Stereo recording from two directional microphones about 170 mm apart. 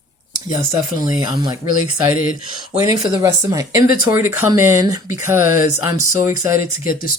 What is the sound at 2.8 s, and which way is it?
Speech, 20° right (ahead or behind).